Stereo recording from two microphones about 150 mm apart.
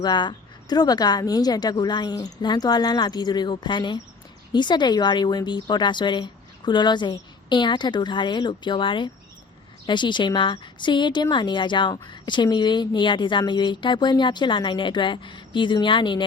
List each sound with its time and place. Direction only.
0.0 s a woman's voice: 30° left (ahead or behind)